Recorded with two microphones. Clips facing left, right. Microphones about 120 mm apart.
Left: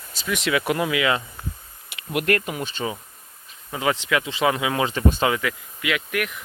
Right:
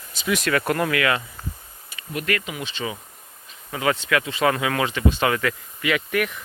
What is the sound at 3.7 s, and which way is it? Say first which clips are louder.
Speech: right 1 dB; 20° left (ahead or behind).